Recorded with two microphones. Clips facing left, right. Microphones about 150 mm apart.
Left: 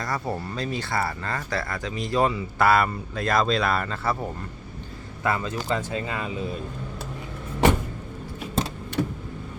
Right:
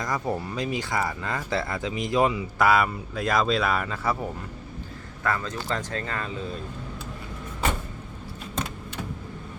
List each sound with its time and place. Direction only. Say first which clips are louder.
0.0 s speech: right 1 dB; 15° right (ahead or behind)
5.2 s speech: left 2 dB; 10° left (ahead or behind)